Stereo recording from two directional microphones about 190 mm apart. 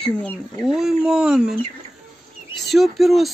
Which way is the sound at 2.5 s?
Centre (ahead or behind).